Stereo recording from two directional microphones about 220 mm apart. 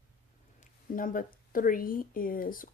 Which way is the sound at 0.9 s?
40° left (ahead or behind).